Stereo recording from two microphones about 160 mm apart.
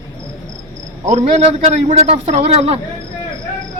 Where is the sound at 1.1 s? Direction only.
45° right (ahead or behind).